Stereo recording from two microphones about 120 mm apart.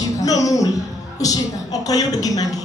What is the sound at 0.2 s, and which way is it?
Music, 30° left (ahead or behind).